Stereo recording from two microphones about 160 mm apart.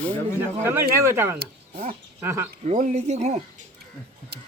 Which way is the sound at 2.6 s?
50° right (ahead or behind).